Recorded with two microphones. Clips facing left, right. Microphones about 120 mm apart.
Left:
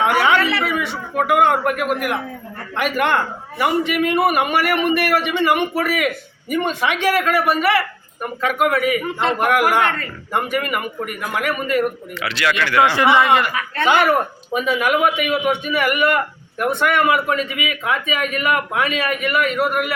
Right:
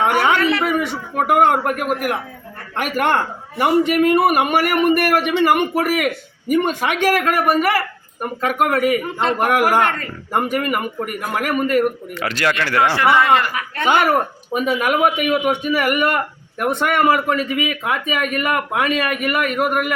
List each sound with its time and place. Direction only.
0.0 s a sound: 45° right (ahead or behind)
1.1 s speech: 45° right (ahead or behind)
12.8 s speech: 20° left (ahead or behind)
14.0 s speech: 45° right (ahead or behind)